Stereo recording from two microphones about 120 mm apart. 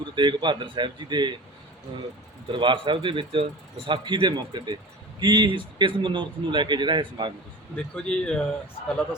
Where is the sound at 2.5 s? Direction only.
40° right (ahead or behind).